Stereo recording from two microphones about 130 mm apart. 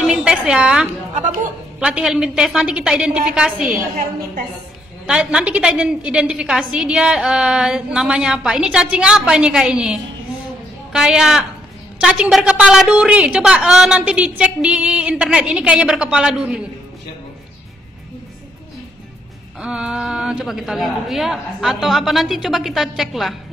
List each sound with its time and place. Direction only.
0.0 s a woman's voice: 5° right (ahead or behind)
1.1 s speech: 70° right (ahead or behind)
1.8 s a woman's voice: 10° right (ahead or behind)
5.0 s a woman's voice: 5° right (ahead or behind)
19.6 s a woman's voice: 5° right (ahead or behind)